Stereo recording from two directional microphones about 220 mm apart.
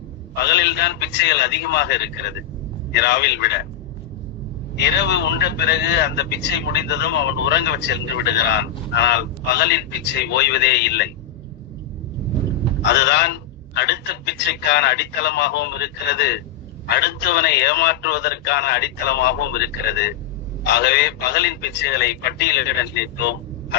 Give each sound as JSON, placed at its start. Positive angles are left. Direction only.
{"t": 0.3, "sound": "speech", "side_deg": 50}
{"t": 4.8, "sound": "speech", "side_deg": 50}
{"t": 12.8, "sound": "speech", "side_deg": 50}